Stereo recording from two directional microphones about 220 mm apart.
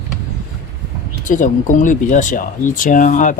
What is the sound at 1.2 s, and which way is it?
Speech, 35° left (ahead or behind).